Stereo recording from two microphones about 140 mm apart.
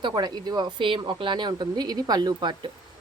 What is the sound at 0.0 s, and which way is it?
A woman's voice, 30° right (ahead or behind).